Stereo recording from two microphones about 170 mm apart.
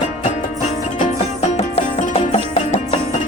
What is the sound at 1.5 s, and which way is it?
Music, 40° left (ahead or behind).